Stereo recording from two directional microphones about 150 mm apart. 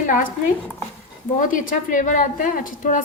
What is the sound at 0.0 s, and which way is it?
Speech, 60° left (ahead or behind).